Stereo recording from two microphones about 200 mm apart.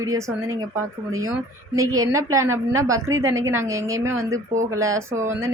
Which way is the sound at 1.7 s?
15° right (ahead or behind).